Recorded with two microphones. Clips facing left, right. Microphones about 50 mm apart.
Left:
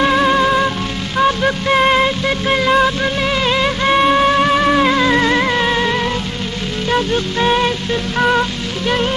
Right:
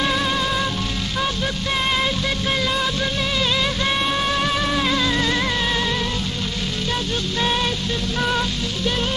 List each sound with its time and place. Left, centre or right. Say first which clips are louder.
0.0 s music: left 8 dB; left
8.8 s music: left 7 dB; left